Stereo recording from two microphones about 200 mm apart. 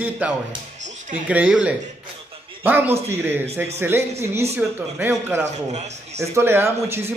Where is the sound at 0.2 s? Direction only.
5° right (ahead or behind).